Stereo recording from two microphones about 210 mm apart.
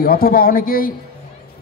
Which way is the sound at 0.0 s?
45° left (ahead or behind).